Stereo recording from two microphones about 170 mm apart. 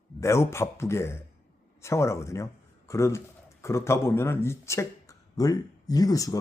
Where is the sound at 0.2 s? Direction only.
15° left (ahead or behind).